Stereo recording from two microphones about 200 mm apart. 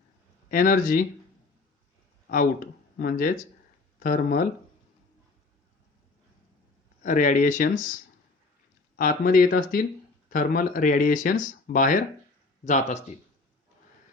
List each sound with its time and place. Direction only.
0.4 s speech: 40° left (ahead or behind)
3.0 s speech: 45° left (ahead or behind)
7.0 s speech: 40° left (ahead or behind)
9.0 s speech: 45° left (ahead or behind)